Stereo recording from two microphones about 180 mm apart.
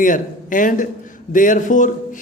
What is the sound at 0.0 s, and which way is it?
Speech, 45° left (ahead or behind).